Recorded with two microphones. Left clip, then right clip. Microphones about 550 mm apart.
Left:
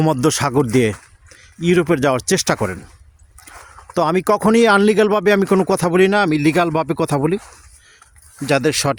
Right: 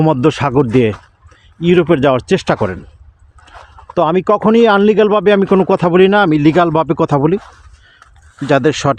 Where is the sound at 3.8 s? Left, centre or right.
Left.